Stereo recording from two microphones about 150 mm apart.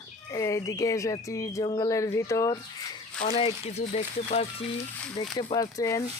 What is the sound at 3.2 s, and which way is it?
Speech, 40° left (ahead or behind).